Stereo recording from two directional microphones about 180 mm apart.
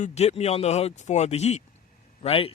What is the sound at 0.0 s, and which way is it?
A man's voice, 35° left (ahead or behind).